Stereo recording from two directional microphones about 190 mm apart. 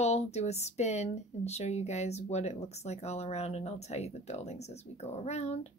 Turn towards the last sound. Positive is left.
turn(degrees=35)  # may be behind; listen again after turning